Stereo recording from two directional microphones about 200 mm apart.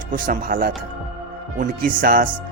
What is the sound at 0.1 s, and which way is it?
Speech, 45° right (ahead or behind).